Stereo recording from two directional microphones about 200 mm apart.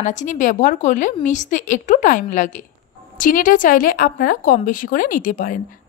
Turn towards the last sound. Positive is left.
turn(degrees=45)  # may be behind; listen again after turning